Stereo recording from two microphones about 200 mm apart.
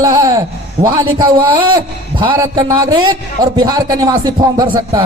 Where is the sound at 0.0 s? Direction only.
15° right (ahead or behind).